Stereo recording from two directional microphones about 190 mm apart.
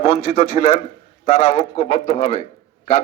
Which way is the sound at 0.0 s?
35° left (ahead or behind).